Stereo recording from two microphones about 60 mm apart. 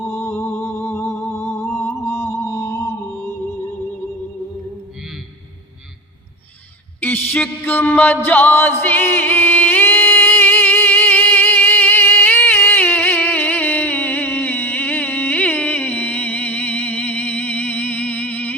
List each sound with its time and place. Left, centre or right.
0.1 s music: left
7.0 s mantra: left
7.6 s music: left